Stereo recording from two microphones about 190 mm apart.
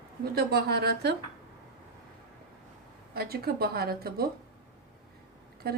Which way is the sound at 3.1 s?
55° right (ahead or behind).